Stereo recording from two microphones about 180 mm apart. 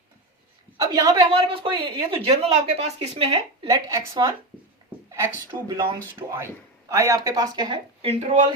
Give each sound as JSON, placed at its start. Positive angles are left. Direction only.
{"t": 0.8, "sound": "a sound", "side_deg": -20}
{"t": 1.3, "sound": "a woman's voice", "side_deg": -30}
{"t": 3.7, "sound": "a woman's voice", "side_deg": -15}
{"t": 5.1, "sound": "speech", "side_deg": -15}